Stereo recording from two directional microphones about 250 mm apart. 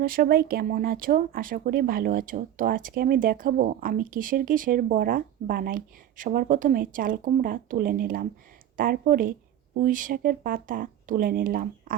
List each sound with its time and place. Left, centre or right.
0.0 s speech: right